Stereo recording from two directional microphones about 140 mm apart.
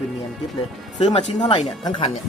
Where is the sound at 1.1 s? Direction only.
50° left (ahead or behind).